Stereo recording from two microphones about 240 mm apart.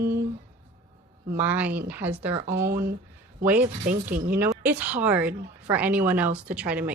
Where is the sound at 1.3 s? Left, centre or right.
Centre.